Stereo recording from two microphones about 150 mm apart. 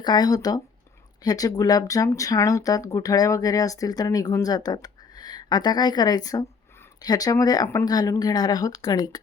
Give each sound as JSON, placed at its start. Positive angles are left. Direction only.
{"t": 0.0, "sound": "speech", "side_deg": 30}